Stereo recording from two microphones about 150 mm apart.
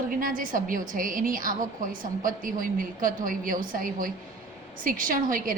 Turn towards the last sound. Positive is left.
turn(degrees=-65)  # may be behind; listen again after turning